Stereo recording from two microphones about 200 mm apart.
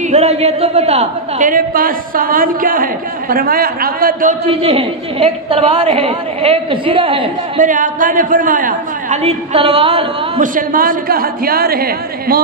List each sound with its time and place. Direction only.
0.1 s a woman's voice: 30° right (ahead or behind)
4.5 s a woman's voice: 30° right (ahead or behind)
7.6 s a woman's voice: 40° right (ahead or behind)
10.4 s a woman's voice: 45° right (ahead or behind)